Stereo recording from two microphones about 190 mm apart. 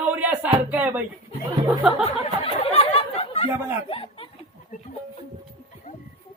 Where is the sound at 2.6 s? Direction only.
30° left (ahead or behind).